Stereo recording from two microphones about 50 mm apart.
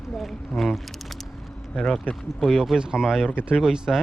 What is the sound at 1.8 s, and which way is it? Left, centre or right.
Speech, centre.